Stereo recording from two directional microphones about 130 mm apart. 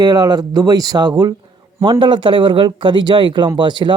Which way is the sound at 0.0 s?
30° right (ahead or behind).